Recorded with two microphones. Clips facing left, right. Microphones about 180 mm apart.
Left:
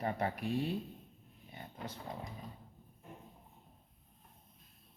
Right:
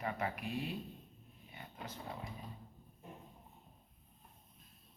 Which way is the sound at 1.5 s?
35° left (ahead or behind).